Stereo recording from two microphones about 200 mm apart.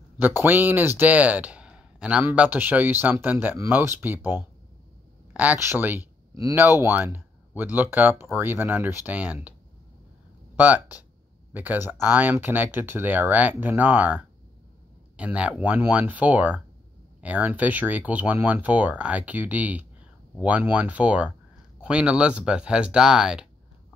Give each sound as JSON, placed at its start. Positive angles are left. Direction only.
{"t": 0.7, "sound": "speech", "side_deg": -10}
{"t": 10.5, "sound": "speech", "side_deg": -10}